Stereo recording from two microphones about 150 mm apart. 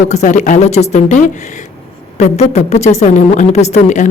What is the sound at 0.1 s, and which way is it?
A woman's voice, 50° left (ahead or behind).